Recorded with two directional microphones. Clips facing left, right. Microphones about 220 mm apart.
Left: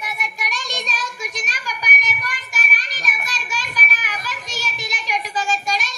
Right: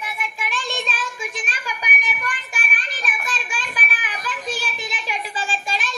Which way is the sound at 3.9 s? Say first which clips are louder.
Even; 40° left (ahead or behind).